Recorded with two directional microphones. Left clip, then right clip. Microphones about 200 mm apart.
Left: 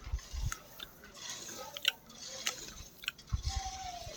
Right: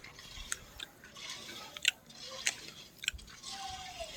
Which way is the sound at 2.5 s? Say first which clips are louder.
Right 3 dB; 10° left (ahead or behind).